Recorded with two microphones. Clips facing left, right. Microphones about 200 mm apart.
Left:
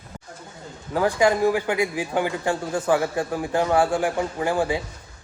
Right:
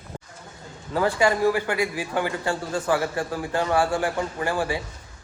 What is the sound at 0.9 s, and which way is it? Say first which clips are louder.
A man's voice: left 2 dB; 15° left (ahead or behind).